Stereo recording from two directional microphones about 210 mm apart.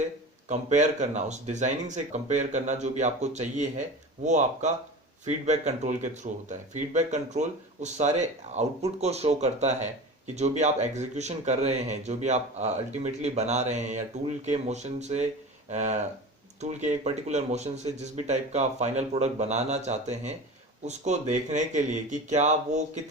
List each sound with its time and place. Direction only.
0.4 s speech: 35° right (ahead or behind)